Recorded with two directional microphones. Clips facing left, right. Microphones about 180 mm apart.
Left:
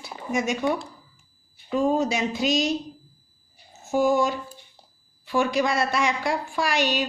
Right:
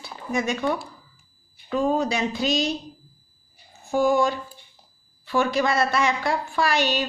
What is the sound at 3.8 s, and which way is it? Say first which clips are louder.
A woman's voice: right 1 dB; centre (ahead or behind).